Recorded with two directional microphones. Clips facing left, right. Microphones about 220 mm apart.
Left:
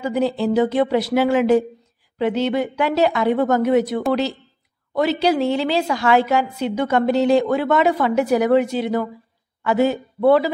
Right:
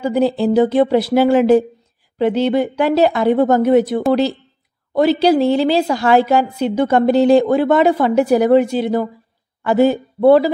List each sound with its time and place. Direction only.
0.0 s a woman's voice: 35° right (ahead or behind)